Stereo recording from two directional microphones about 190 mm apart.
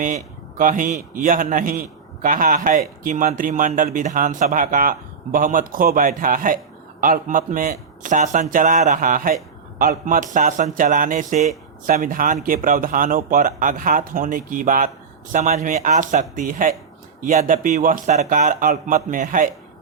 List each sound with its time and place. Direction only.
0.6 s a man's voice: 45° right (ahead or behind)